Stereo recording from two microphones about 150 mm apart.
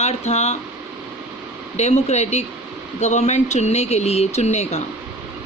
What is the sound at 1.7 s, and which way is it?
Speech, 45° left (ahead or behind).